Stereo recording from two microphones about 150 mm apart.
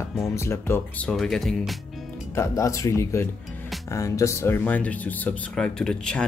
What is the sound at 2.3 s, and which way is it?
Speech, 20° left (ahead or behind).